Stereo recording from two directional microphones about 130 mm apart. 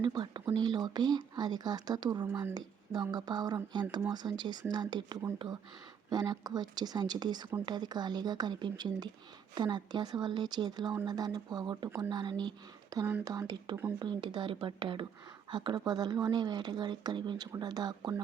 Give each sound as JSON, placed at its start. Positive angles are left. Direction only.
{"t": 0.0, "sound": "speech", "side_deg": -35}